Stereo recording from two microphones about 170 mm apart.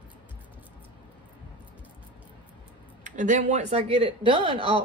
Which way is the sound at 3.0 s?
45° right (ahead or behind).